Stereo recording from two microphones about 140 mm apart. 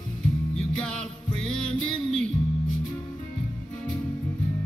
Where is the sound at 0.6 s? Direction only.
5° left (ahead or behind).